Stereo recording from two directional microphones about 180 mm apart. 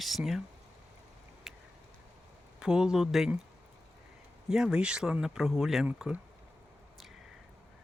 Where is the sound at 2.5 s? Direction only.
5° right (ahead or behind).